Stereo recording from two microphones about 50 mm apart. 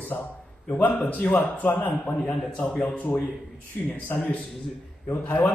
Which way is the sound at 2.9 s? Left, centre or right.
Left.